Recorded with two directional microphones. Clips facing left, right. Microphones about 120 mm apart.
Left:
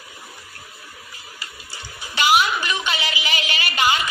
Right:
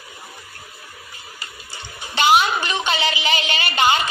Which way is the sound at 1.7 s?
25° right (ahead or behind).